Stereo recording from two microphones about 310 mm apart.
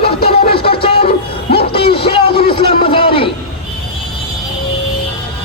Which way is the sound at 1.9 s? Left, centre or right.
Centre.